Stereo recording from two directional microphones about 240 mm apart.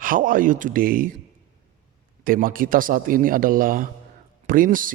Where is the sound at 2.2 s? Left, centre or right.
Right.